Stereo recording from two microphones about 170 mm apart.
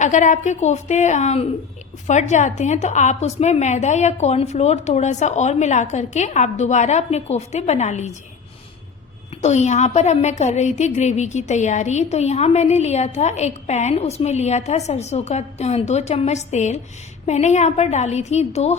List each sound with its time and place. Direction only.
0.0 s a woman's voice: 45° left (ahead or behind)
9.4 s a woman's voice: 40° left (ahead or behind)